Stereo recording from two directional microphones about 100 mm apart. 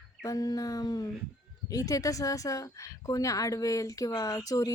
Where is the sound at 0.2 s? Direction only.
35° left (ahead or behind).